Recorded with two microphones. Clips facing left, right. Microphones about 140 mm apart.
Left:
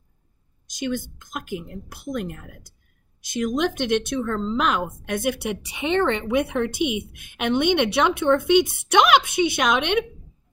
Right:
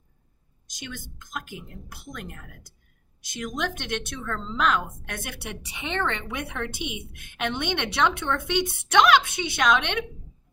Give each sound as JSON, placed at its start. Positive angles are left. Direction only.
{"t": 0.7, "sound": "a woman's voice", "side_deg": 15}